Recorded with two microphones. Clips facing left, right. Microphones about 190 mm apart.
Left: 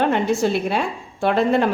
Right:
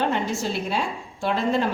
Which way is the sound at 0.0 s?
60° left (ahead or behind).